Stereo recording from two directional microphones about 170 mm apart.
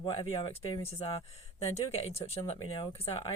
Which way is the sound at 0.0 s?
35° left (ahead or behind).